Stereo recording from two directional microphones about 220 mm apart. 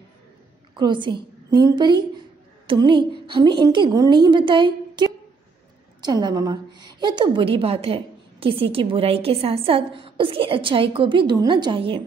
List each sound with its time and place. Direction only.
0.7 s a woman's voice: 20° right (ahead or behind)